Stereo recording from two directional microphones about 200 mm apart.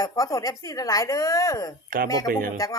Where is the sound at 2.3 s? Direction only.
45° right (ahead or behind).